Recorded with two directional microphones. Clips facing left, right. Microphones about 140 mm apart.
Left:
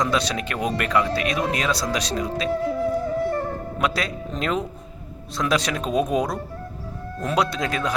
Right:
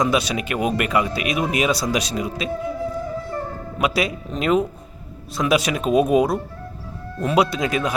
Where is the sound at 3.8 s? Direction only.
10° right (ahead or behind).